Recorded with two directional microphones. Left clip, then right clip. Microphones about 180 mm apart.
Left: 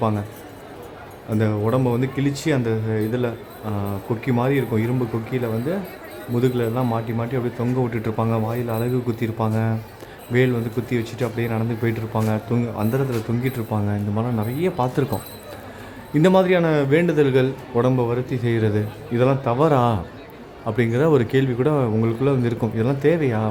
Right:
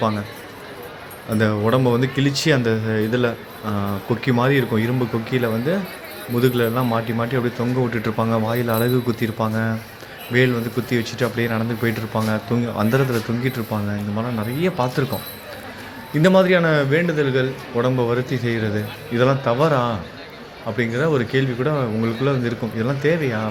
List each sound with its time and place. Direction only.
1.4 s speech: centre (ahead or behind)
8.4 s speech: 10° right (ahead or behind)
9.0 s speech: 10° left (ahead or behind)
16.2 s speech: 15° left (ahead or behind)
16.9 s speech: 25° left (ahead or behind); by 18.5 s 10° left (ahead or behind)
18.5 s speech: 25° left (ahead or behind)